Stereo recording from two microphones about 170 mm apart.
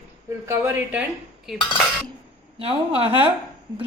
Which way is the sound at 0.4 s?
15° right (ahead or behind).